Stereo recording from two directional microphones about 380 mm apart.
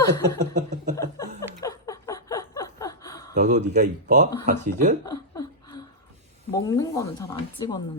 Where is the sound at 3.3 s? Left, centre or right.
Centre.